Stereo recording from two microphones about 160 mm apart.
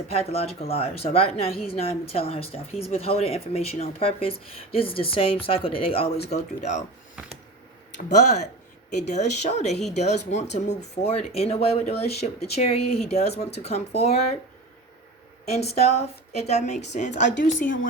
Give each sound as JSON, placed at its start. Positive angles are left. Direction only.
{"t": 0.1, "sound": "speech", "side_deg": 40}
{"t": 8.1, "sound": "speech", "side_deg": 45}
{"t": 15.4, "sound": "a woman's voice", "side_deg": 40}